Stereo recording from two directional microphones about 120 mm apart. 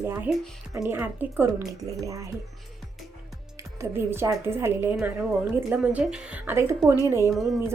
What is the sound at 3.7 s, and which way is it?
A woman's voice, 20° right (ahead or behind).